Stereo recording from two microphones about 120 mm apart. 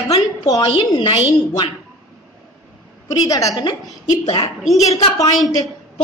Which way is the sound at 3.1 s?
30° left (ahead or behind).